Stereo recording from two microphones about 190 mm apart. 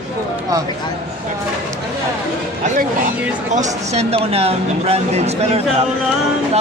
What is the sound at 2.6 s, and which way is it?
Speech, 40° right (ahead or behind).